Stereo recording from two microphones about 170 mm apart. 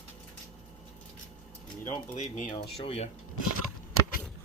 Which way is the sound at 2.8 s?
35° left (ahead or behind).